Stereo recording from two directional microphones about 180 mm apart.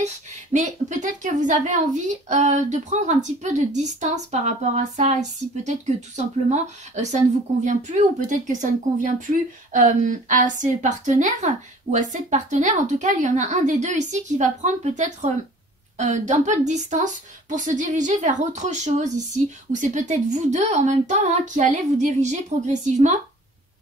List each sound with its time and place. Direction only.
0.0 s a woman's voice: 40° right (ahead or behind)